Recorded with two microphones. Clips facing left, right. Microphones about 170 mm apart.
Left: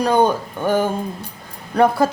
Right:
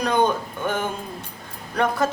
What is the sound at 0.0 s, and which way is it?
Speech, 35° left (ahead or behind).